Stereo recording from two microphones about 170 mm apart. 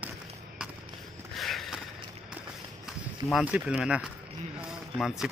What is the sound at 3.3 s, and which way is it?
Speech, 5° right (ahead or behind).